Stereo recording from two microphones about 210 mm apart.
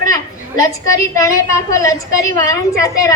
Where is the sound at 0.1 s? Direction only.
15° left (ahead or behind).